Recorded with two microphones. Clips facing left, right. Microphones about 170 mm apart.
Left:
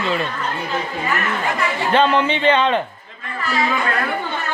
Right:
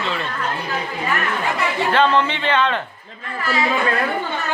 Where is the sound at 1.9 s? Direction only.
15° left (ahead or behind).